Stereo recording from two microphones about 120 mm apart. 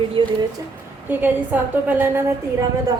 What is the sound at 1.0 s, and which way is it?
A woman's voice, 15° right (ahead or behind).